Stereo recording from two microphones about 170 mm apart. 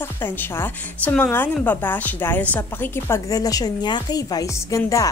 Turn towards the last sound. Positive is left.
turn(degrees=20)  # may be behind; listen again after turning